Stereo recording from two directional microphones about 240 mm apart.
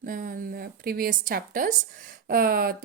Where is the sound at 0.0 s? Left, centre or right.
Right.